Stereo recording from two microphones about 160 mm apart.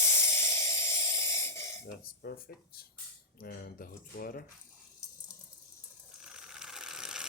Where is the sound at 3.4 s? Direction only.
65° left (ahead or behind).